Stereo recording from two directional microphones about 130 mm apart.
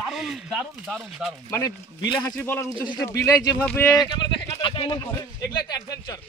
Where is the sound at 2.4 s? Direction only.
15° left (ahead or behind).